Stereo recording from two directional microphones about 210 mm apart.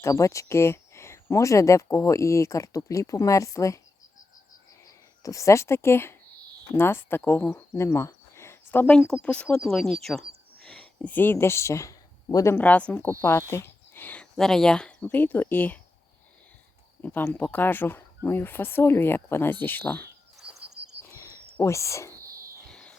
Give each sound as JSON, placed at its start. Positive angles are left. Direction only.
{"t": 0.0, "sound": "speech", "side_deg": 15}
{"t": 4.9, "sound": "speech", "side_deg": 15}
{"t": 17.0, "sound": "speech", "side_deg": 10}
{"t": 21.2, "sound": "a sound", "side_deg": 15}